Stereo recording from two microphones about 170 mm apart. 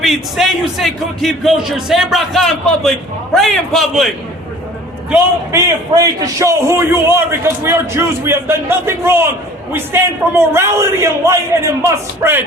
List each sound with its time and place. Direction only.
0.0 s speech: centre (ahead or behind)
5.1 s a man's voice: 15° right (ahead or behind)